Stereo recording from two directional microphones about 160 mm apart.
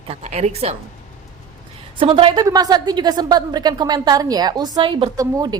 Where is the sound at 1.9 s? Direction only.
35° right (ahead or behind).